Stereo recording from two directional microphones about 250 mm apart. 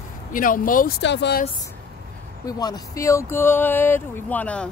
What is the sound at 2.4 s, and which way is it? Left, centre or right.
Speech, centre.